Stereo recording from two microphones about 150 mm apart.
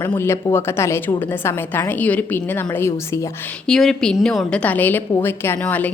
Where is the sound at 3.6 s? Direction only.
5° left (ahead or behind).